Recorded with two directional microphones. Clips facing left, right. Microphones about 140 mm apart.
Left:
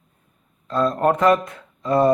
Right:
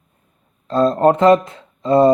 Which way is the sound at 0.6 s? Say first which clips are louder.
Right 5 dB; 30° right (ahead or behind).